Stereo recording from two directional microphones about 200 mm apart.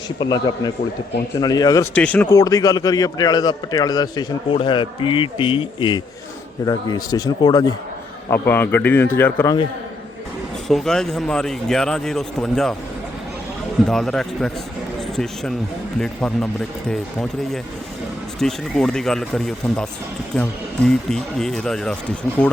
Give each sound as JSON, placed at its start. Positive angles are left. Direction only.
{"t": 0.2, "sound": "a man's voice", "side_deg": 20}
{"t": 2.0, "sound": "a man's voice", "side_deg": 5}
{"t": 10.7, "sound": "speech", "side_deg": 0}
{"t": 13.8, "sound": "a man's voice", "side_deg": 0}